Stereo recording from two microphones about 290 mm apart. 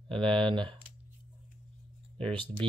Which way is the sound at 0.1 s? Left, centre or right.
Centre.